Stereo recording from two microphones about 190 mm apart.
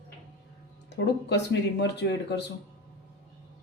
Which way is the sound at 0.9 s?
65° left (ahead or behind).